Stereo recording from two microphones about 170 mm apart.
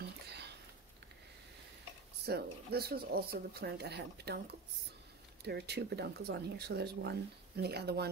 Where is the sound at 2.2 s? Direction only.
65° right (ahead or behind).